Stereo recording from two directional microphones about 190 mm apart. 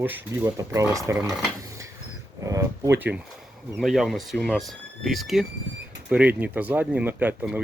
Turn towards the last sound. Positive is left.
turn(degrees=-10)  # may be behind; listen again after turning